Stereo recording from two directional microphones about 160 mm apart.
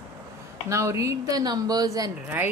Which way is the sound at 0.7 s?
20° right (ahead or behind).